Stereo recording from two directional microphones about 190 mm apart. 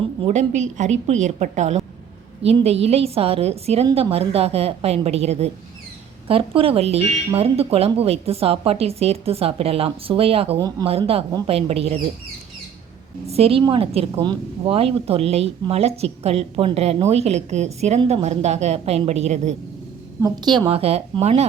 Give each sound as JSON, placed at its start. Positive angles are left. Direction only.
{"t": 0.2, "sound": "a woman's voice", "side_deg": -35}
{"t": 13.2, "sound": "a woman's voice", "side_deg": -30}
{"t": 20.2, "sound": "a woman's voice", "side_deg": -20}